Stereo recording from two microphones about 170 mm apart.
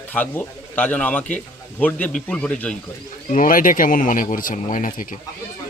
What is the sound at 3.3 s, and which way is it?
Speech, 50° left (ahead or behind).